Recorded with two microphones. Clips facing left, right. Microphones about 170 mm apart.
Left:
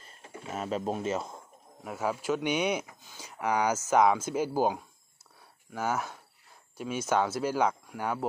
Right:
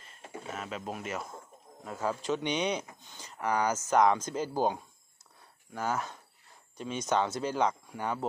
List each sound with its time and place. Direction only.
0.6 s speech: 35° left (ahead or behind)
1.9 s speech: 10° left (ahead or behind)